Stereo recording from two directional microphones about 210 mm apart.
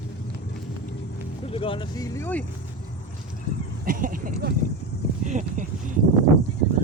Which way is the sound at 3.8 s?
40° right (ahead or behind).